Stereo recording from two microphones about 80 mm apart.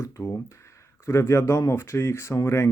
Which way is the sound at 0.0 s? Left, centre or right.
Left.